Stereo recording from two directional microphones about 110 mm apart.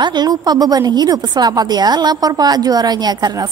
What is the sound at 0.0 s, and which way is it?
A woman's voice, 40° right (ahead or behind).